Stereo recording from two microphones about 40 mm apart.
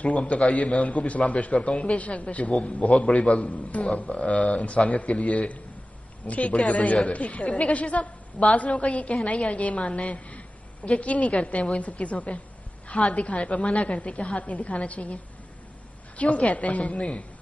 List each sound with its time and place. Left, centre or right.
0.0 s a man's voice: left